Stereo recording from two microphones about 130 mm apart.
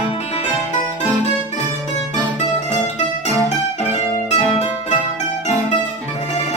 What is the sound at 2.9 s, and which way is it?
Music, 60° left (ahead or behind).